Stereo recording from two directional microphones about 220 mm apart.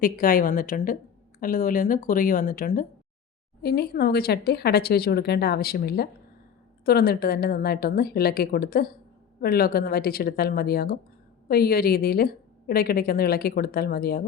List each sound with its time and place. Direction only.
0.0 s a woman's voice: 40° left (ahead or behind)